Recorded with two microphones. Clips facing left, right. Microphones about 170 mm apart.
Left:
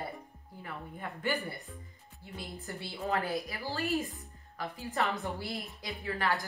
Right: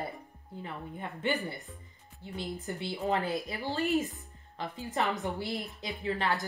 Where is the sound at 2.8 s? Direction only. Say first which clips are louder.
Right 2 dB; 20° right (ahead or behind).